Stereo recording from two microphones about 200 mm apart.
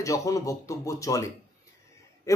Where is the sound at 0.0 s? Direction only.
15° left (ahead or behind).